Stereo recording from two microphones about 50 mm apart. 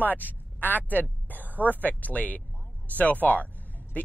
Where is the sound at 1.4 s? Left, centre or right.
Right.